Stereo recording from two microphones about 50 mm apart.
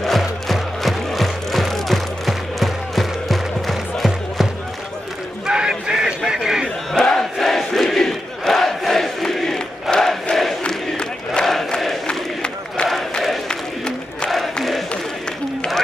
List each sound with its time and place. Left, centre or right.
0.2 s music: centre
5.5 s a sound: centre
7.0 s crowd: centre
10.6 s crowd: centre
12.1 s battle cry: centre
13.5 s crowd: centre
14.3 s battle cry: centre